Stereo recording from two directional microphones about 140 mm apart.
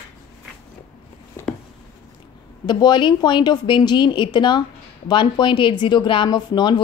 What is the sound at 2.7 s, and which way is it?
Speech, 30° left (ahead or behind).